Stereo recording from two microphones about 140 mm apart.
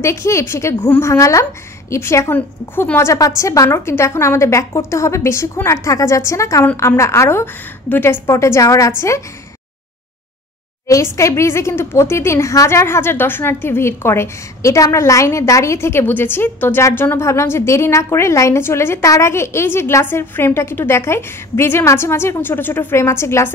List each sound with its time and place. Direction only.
0.0 s a woman's voice: 20° left (ahead or behind)
10.9 s a woman's voice: 20° left (ahead or behind)